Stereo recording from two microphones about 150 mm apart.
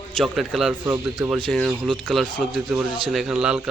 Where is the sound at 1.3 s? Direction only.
5° left (ahead or behind).